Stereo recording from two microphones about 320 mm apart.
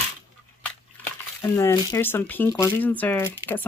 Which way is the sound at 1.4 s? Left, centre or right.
Centre.